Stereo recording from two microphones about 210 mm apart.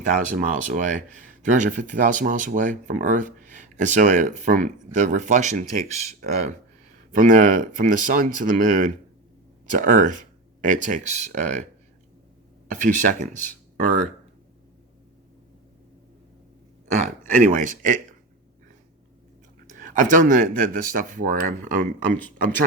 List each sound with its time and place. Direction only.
0.0 s speech: 40° right (ahead or behind)
12.6 s speech: 40° right (ahead or behind)
16.9 s speech: 35° right (ahead or behind)
19.6 s speech: 40° right (ahead or behind)